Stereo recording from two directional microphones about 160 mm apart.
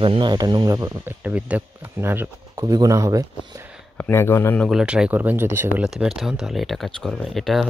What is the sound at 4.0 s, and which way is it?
Speech, 15° left (ahead or behind).